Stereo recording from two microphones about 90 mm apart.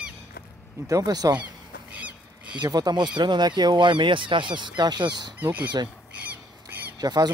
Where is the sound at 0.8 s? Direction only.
40° right (ahead or behind).